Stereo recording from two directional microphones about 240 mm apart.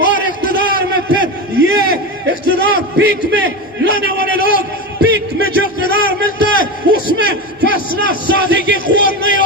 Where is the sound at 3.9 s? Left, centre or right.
Left.